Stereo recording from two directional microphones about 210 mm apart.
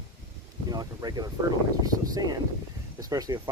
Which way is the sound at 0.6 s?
20° right (ahead or behind).